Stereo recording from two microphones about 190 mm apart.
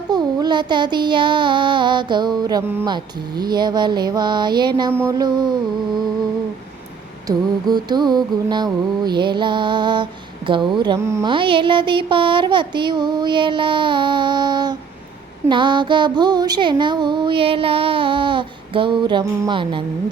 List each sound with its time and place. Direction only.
0.1 s child singing: 20° right (ahead or behind)
7.3 s child singing: 20° right (ahead or behind)
11.3 s child singing: 25° right (ahead or behind)